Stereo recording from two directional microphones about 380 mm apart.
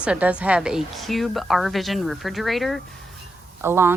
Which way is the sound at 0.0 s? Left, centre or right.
Centre.